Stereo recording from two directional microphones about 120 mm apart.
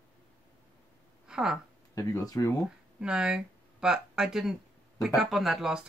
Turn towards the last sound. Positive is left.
turn(degrees=-5)  # may be behind; listen again after turning